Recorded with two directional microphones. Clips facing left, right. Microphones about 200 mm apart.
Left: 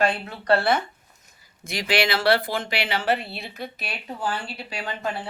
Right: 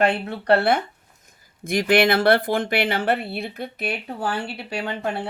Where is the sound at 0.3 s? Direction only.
60° right (ahead or behind).